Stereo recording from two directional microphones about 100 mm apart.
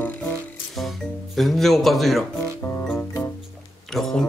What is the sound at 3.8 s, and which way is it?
Speech, 5° left (ahead or behind).